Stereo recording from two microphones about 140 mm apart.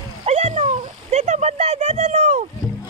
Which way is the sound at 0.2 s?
50° right (ahead or behind).